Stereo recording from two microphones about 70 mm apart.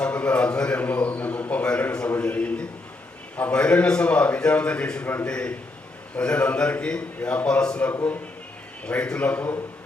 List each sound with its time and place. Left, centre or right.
0.0 s a sound: centre
3.3 s a man's voice: centre
8.9 s a man's voice: centre